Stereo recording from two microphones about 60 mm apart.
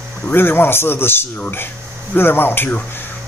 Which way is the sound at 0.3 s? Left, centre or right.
Left.